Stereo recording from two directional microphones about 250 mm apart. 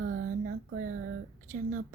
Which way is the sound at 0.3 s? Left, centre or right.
Right.